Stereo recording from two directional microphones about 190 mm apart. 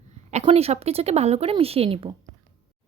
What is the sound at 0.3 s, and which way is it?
Speech, 35° right (ahead or behind).